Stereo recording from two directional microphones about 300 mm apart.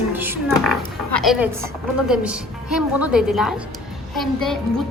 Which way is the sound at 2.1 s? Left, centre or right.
Centre.